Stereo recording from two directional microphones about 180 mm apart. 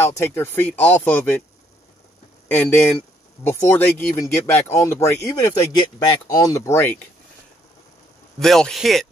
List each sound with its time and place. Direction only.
0.0 s speech: 15° left (ahead or behind)
2.4 s speech: 10° left (ahead or behind)
8.4 s a man's voice: centre (ahead or behind)